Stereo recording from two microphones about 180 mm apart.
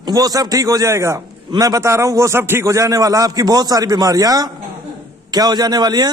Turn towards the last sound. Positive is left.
turn(degrees=-20)  # may be behind; listen again after turning